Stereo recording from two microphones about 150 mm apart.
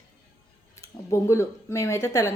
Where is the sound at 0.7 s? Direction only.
20° left (ahead or behind).